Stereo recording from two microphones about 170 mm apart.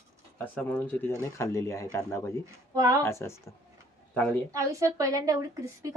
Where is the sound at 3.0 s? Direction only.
15° left (ahead or behind).